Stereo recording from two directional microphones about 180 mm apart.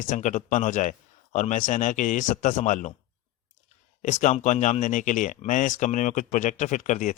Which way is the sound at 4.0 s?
45° left (ahead or behind).